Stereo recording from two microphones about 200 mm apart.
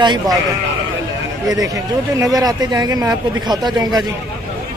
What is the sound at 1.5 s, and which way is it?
Speech, 15° right (ahead or behind).